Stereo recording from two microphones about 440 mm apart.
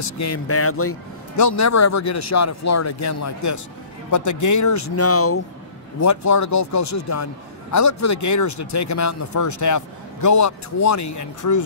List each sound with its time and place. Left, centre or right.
0.0 s speech: left